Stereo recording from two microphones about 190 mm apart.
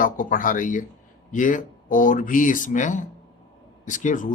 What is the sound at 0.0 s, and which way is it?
Speech, 45° left (ahead or behind).